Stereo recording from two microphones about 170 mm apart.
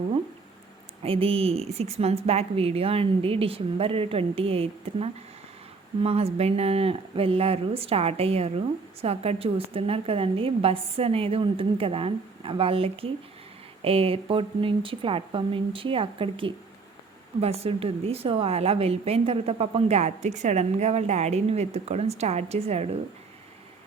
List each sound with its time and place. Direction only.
1.0 s speech: 35° right (ahead or behind)